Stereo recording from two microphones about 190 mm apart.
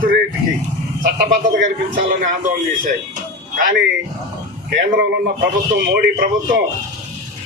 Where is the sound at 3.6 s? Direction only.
50° right (ahead or behind).